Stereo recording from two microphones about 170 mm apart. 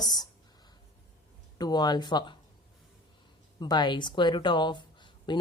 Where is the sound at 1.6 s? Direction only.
25° left (ahead or behind).